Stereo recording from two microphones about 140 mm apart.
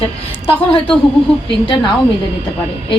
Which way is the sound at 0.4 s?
40° left (ahead or behind).